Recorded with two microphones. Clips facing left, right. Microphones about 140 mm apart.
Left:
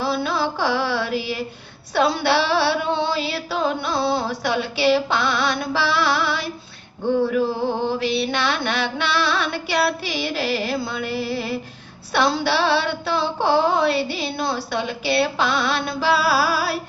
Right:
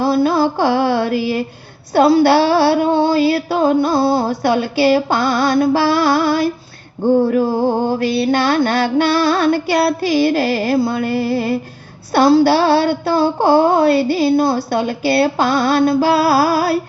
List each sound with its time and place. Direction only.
0.0 s carnatic music: 45° right (ahead or behind)
1.9 s female singing: 45° right (ahead or behind)